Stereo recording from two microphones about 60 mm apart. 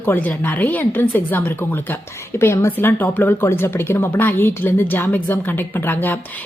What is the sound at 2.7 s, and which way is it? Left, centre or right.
Speech, left.